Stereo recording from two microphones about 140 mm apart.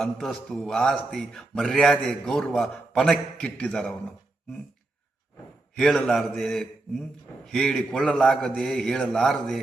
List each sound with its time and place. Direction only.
0.0 s a man's voice: 5° left (ahead or behind)
5.7 s a man's voice: centre (ahead or behind)